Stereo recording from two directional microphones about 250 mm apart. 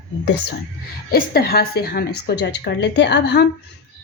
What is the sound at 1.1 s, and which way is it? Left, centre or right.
A woman's voice, left.